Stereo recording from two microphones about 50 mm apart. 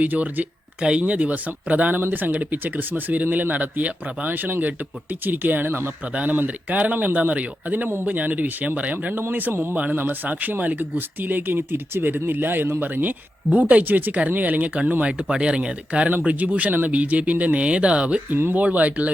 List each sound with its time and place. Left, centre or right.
0.0 s speech: right
0.8 s speech: right
9.3 s speech: right
9.7 s speech: right
15.2 s speech: centre